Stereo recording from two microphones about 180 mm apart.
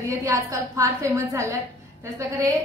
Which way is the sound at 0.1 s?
15° right (ahead or behind).